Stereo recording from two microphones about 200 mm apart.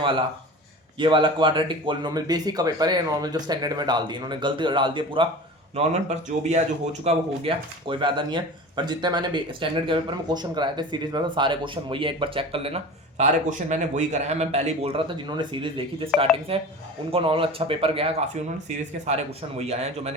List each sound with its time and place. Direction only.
0.9 s speech: 25° right (ahead or behind)
16.1 s speech: centre (ahead or behind)
16.5 s speech: 30° right (ahead or behind)